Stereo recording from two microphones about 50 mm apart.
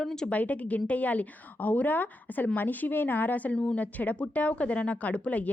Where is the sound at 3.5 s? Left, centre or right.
Centre.